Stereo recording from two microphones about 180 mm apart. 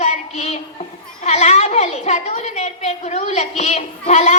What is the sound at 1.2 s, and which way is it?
A woman's voice, 40° left (ahead or behind).